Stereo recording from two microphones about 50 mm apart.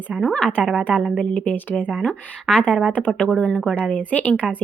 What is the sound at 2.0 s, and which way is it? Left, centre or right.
Speech, centre.